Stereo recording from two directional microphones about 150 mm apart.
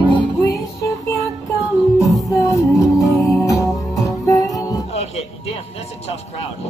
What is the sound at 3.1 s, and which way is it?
Music, 20° left (ahead or behind).